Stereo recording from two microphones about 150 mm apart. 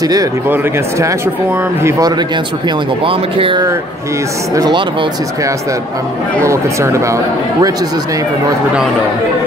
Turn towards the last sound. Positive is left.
turn(degrees=-20)  # may be behind; listen again after turning